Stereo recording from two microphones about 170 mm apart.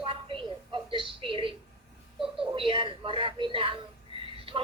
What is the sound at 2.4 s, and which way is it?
A woman's voice, 30° right (ahead or behind).